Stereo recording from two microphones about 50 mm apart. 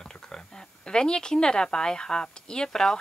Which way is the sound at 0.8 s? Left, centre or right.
Centre.